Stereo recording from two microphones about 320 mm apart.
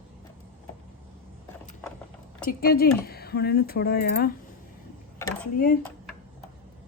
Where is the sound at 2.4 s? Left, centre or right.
Left.